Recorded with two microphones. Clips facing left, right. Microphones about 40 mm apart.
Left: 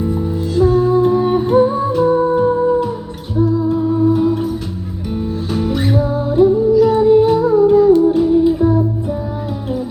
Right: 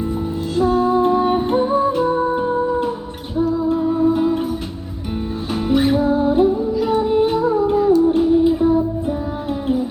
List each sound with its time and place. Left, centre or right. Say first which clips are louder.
0.0 s music: left 3 dB; centre